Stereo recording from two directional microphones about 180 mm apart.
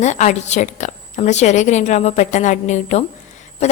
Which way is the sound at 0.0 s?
40° left (ahead or behind).